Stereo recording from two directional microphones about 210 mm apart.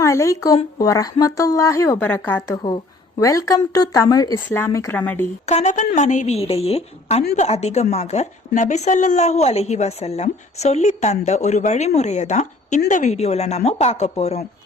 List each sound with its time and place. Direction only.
0.0 s a woman's voice: 15° left (ahead or behind)
5.5 s a woman's voice: 35° left (ahead or behind)